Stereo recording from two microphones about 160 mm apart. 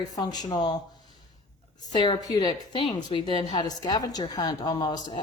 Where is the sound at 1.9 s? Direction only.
25° left (ahead or behind).